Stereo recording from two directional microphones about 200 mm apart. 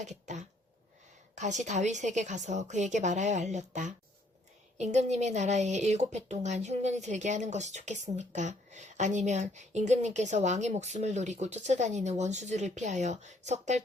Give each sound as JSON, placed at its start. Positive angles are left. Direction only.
{"t": 0.0, "sound": "speech", "side_deg": -35}